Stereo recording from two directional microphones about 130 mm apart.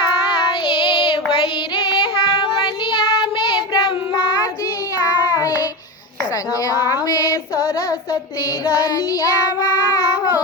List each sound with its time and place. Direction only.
0.0 s child singing: 40° left (ahead or behind)
6.7 s child singing: 30° left (ahead or behind)
8.8 s child singing: 30° left (ahead or behind)